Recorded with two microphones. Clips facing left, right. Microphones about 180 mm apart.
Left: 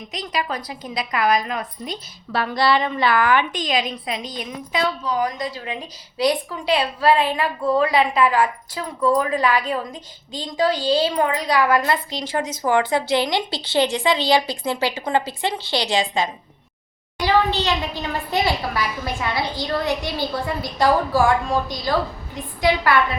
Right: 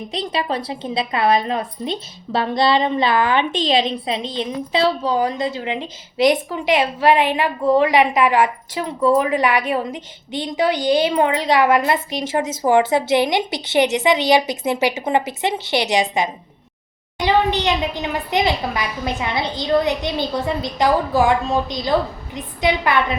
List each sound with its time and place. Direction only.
0.1 s a woman's voice: 30° right (ahead or behind)